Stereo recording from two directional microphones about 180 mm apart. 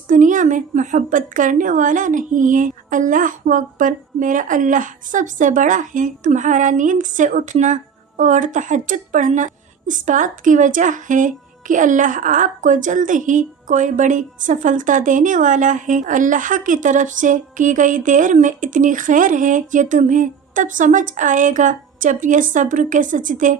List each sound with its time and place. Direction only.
0.1 s a woman's voice: 45° right (ahead or behind)